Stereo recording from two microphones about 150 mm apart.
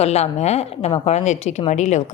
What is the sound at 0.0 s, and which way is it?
A woman's voice, 45° left (ahead or behind).